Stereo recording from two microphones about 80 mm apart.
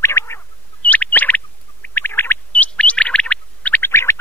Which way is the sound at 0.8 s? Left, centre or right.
Centre.